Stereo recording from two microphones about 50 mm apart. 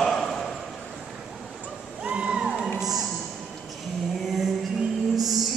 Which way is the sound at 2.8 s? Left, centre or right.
Centre.